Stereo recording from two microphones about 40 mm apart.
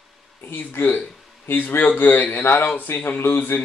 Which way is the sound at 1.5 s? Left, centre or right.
Left.